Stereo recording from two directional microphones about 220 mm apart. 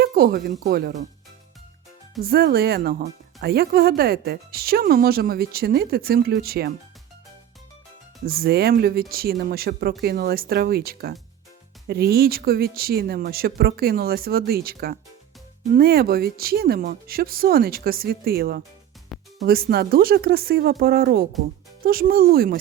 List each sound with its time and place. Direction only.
0.0 s speech: 40° right (ahead or behind)
2.2 s speech: 45° right (ahead or behind)
8.2 s speech: 45° right (ahead or behind)